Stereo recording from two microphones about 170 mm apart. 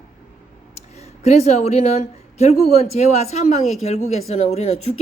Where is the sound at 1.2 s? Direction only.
40° left (ahead or behind).